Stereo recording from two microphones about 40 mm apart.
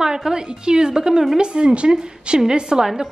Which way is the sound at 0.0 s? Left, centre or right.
Centre.